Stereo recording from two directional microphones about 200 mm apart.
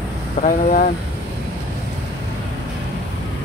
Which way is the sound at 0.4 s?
40° left (ahead or behind).